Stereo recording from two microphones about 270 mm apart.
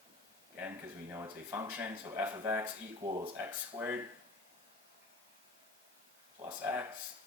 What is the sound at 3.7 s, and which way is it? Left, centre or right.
Speech, centre.